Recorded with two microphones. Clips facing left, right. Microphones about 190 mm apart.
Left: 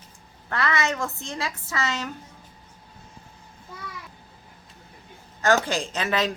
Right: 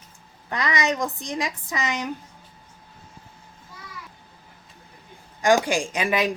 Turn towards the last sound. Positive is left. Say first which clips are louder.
# right 2 dB
turn(degrees=-15)  # may be behind; listen again after turning